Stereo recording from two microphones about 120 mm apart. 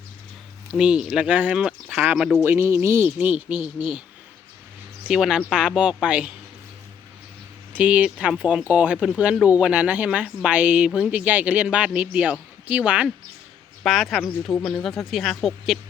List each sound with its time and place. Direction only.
0.7 s a woman's voice: 5° right (ahead or behind)
5.0 s speech: 5° right (ahead or behind)
7.7 s a woman's voice: 10° right (ahead or behind)